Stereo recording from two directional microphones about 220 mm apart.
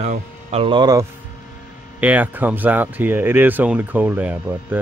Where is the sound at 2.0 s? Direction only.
5° right (ahead or behind).